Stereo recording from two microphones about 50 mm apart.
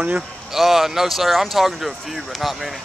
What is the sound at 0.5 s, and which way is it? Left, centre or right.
Speech, centre.